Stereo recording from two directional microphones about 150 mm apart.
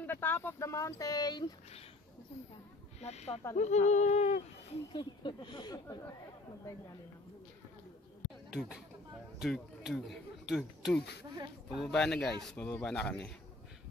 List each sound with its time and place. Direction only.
0.0 s speech: 15° left (ahead or behind)
3.0 s speech: 45° left (ahead or behind)
4.9 s speech: 30° left (ahead or behind)
8.5 s speech: centre (ahead or behind)